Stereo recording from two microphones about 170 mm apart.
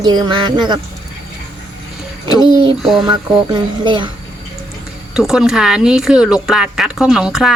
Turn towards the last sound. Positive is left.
turn(degrees=-5)  # may be behind; listen again after turning